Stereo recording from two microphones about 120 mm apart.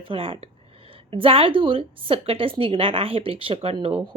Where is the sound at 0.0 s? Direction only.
50° right (ahead or behind).